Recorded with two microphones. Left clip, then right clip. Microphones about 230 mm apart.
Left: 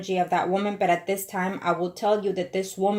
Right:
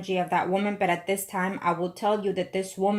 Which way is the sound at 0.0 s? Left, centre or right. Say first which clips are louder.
Left 2 dB; right.